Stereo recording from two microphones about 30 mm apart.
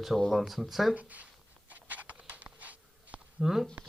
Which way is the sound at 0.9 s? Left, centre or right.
Right.